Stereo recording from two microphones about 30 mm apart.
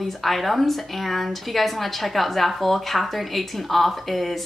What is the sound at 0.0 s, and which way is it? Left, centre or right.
Speech, centre.